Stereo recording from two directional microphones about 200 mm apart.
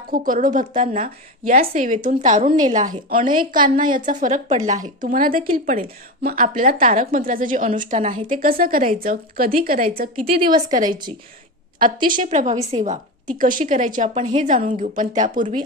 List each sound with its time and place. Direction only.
0.1 s a woman's voice: 45° right (ahead or behind)
11.8 s a woman's voice: 45° right (ahead or behind)